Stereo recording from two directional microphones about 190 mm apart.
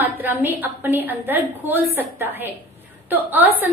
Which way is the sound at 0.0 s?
10° right (ahead or behind).